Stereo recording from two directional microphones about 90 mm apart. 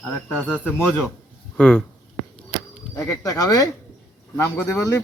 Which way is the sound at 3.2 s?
45° left (ahead or behind).